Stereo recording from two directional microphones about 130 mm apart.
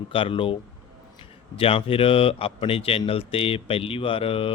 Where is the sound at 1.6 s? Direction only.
45° left (ahead or behind).